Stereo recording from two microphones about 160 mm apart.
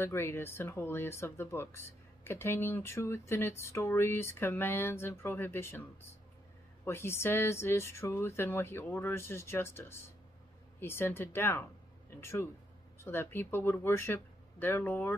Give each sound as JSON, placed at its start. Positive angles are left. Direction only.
{"t": 0.0, "sound": "speech", "side_deg": 15}